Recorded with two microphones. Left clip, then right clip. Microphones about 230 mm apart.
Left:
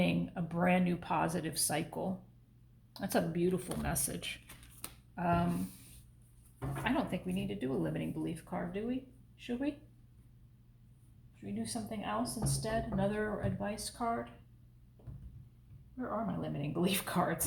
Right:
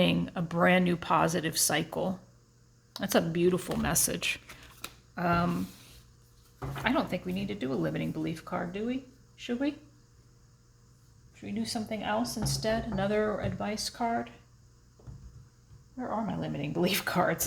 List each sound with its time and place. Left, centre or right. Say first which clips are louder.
0.0 s speech: right 7 dB; right
6.8 s speech: right 6 dB; right
11.4 s speech: right 6 dB; right
16.0 s speech: right 4 dB; right